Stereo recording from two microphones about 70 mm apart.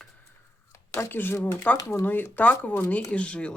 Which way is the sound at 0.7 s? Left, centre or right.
Left.